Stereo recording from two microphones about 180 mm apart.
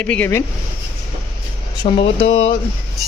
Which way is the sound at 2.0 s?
90° left.